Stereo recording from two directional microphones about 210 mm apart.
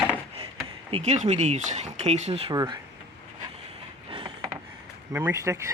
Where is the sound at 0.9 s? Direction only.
30° right (ahead or behind).